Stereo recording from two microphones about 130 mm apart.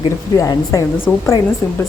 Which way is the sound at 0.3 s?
25° left (ahead or behind).